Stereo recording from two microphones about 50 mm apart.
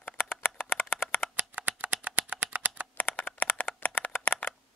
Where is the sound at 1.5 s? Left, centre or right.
Right.